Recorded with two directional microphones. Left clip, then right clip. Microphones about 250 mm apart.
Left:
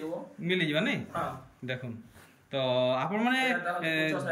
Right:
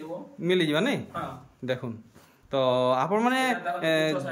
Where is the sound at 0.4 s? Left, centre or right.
Centre.